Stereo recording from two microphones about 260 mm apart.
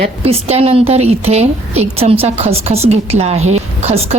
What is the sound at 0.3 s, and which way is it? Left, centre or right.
A woman's voice, right.